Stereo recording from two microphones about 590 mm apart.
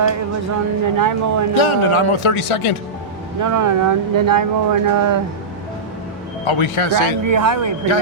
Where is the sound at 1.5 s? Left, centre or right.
Left.